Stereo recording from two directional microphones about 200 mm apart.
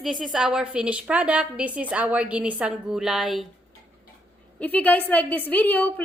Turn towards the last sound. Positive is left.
turn(degrees=10)  # may be behind; listen again after turning